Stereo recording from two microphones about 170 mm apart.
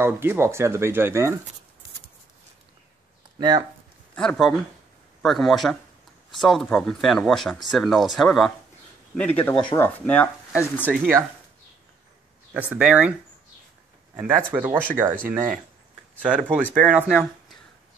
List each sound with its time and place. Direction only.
0.0 s speech: 15° right (ahead or behind)
3.3 s speech: 25° right (ahead or behind)
4.1 s speech: 5° left (ahead or behind)
10.9 s speech: 15° right (ahead or behind)
12.5 s speech: 10° right (ahead or behind)
14.1 s speech: 10° right (ahead or behind)